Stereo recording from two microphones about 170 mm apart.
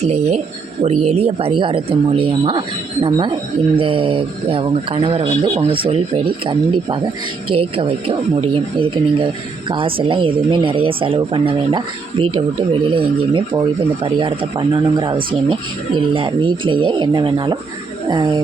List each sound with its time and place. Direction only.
0.0 s speech: 40° right (ahead or behind)